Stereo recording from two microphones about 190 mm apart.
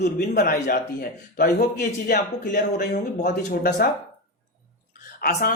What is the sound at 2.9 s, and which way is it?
Speech, 40° left (ahead or behind).